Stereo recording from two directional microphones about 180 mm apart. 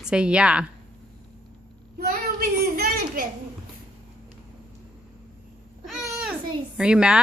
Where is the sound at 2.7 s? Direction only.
55° right (ahead or behind).